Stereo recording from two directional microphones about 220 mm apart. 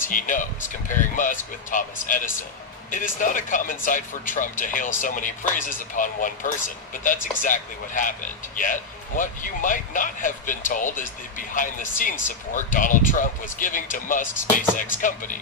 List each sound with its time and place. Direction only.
0.1 s speech: 35° left (ahead or behind)